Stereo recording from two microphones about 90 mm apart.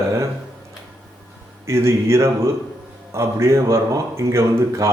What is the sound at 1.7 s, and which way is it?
A man's voice, 30° right (ahead or behind).